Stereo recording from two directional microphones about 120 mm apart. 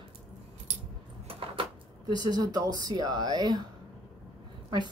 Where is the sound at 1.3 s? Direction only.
50° right (ahead or behind).